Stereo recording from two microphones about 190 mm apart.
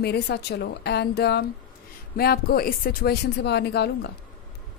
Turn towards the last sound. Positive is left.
turn(degrees=60)  # may be behind; listen again after turning